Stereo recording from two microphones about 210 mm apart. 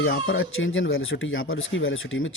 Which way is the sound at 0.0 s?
70° left (ahead or behind).